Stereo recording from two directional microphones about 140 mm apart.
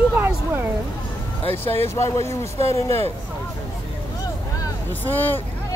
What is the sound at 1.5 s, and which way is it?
Speech, 45° right (ahead or behind).